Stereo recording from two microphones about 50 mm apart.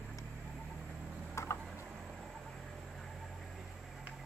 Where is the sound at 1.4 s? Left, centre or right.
Left.